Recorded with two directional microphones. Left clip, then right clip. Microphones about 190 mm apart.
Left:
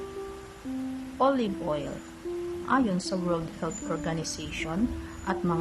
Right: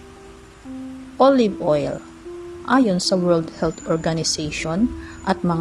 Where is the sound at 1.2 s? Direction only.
20° right (ahead or behind).